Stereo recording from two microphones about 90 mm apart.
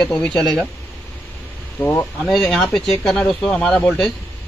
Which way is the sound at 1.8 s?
20° left (ahead or behind).